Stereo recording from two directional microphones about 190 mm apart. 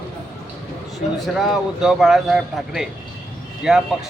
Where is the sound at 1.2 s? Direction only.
Centre (ahead or behind).